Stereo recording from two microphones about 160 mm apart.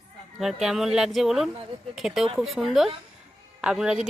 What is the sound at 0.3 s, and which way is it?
A woman's voice, centre (ahead or behind).